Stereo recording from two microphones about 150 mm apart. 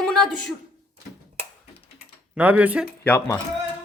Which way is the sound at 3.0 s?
10° left (ahead or behind).